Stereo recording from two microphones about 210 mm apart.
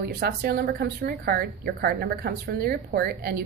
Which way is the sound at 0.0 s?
50° right (ahead or behind).